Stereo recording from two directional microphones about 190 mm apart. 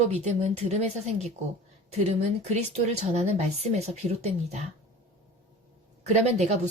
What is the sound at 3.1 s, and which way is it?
A woman's voice, 35° right (ahead or behind).